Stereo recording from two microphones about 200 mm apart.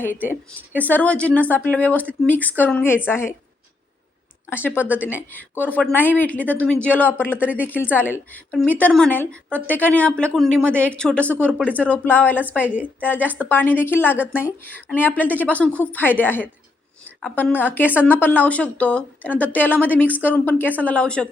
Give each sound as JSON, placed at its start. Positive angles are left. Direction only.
{"t": 0.0, "sound": "a woman's voice", "side_deg": 10}
{"t": 4.4, "sound": "a woman's voice", "side_deg": 10}
{"t": 12.6, "sound": "a woman's voice", "side_deg": -5}
{"t": 13.0, "sound": "a woman's voice", "side_deg": 10}